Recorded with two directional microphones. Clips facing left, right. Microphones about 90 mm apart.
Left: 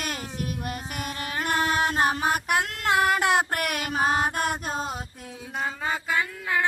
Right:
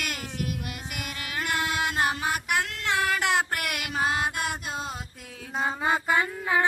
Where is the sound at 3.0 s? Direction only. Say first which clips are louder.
Left 3 dB; 20° left (ahead or behind).